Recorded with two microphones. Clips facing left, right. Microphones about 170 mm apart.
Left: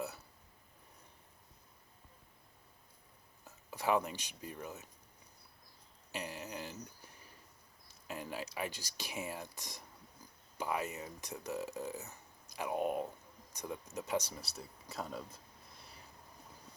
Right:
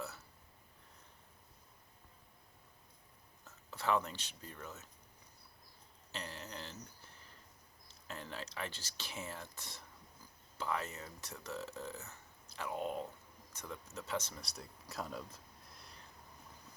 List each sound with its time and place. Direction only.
3.4 s speech: 15° left (ahead or behind)
6.1 s a sound: 15° left (ahead or behind)
8.0 s speech: 10° left (ahead or behind)